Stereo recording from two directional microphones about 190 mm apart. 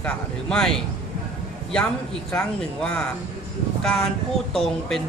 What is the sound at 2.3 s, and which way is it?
Speech, 5° left (ahead or behind).